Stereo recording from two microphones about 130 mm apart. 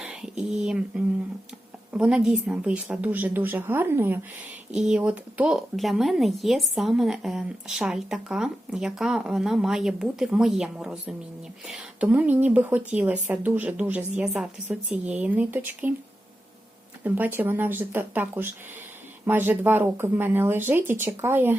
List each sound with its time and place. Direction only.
0.0 s speech: 5° right (ahead or behind)
17.0 s speech: 15° right (ahead or behind)